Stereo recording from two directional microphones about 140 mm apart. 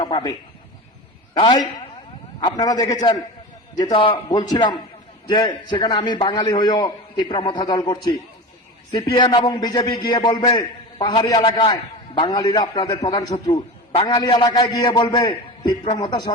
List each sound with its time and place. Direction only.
0.0 s a man's voice: 30° left (ahead or behind)
2.6 s a man's voice: 25° left (ahead or behind)
13.3 s a man's voice: 45° left (ahead or behind)
14.3 s a man's voice: 35° left (ahead or behind)